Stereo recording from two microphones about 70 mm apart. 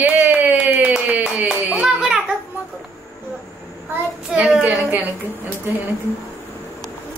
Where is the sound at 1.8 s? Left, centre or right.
Centre.